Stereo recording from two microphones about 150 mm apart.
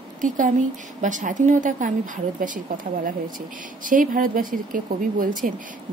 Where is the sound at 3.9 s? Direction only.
65° right (ahead or behind).